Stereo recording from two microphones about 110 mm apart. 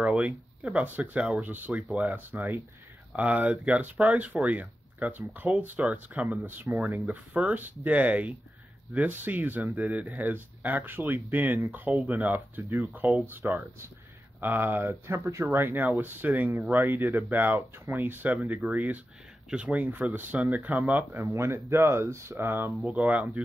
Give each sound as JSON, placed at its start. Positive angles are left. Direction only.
{"t": 0.0, "sound": "speech", "side_deg": -5}
{"t": 0.8, "sound": "speech", "side_deg": -15}
{"t": 1.2, "sound": "speech", "side_deg": -5}
{"t": 1.5, "sound": "speech", "side_deg": -15}
{"t": 22.8, "sound": "speech", "side_deg": -5}